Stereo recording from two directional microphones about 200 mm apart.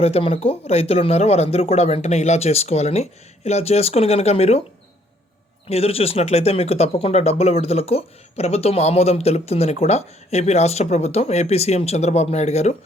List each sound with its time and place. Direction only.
0.0 s speech: 30° left (ahead or behind)
5.6 s speech: 30° left (ahead or behind)